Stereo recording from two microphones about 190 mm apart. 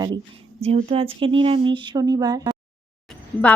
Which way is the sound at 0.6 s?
35° right (ahead or behind).